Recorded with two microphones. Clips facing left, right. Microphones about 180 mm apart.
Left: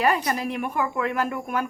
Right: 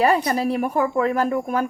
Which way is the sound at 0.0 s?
30° right (ahead or behind).